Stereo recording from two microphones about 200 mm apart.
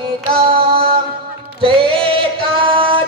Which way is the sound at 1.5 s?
25° right (ahead or behind).